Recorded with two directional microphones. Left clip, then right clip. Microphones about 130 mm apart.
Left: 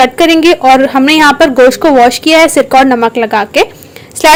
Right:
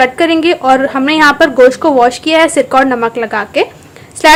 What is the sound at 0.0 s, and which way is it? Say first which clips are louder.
Speech: left 4 dB; 25° left (ahead or behind).